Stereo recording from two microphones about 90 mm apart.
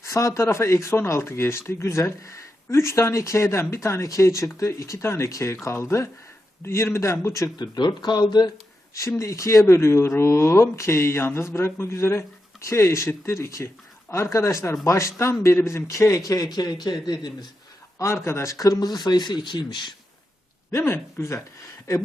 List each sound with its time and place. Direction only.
0.0 s speech: 35° left (ahead or behind)
7.6 s speech: 55° left (ahead or behind)
9.0 s speech: 35° left (ahead or behind); by 17.3 s 50° left (ahead or behind)
17.9 s speech: 30° left (ahead or behind); by 19.9 s 60° left (ahead or behind)
20.7 s speech: 30° left (ahead or behind)